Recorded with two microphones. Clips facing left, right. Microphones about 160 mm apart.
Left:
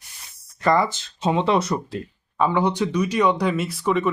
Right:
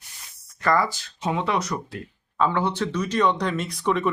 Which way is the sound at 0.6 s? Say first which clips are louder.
Left 3 dB; 20° left (ahead or behind).